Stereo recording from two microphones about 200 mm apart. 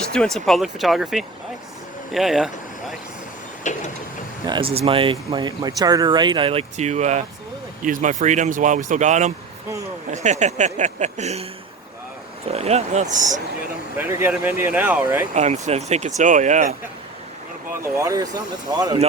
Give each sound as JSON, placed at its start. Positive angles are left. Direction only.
{"t": 0.1, "sound": "speech", "side_deg": 5}
{"t": 3.6, "sound": "vehicle", "side_deg": 35}
{"t": 4.4, "sound": "speech", "side_deg": -25}
{"t": 12.5, "sound": "speech", "side_deg": -30}
{"t": 13.9, "sound": "speech", "side_deg": -10}
{"t": 15.3, "sound": "speech", "side_deg": -35}
{"t": 17.7, "sound": "speech", "side_deg": -15}